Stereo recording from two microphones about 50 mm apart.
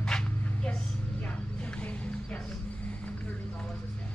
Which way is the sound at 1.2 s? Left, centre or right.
Left.